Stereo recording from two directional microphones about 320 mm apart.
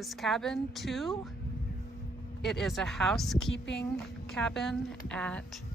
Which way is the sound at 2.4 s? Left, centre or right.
Centre.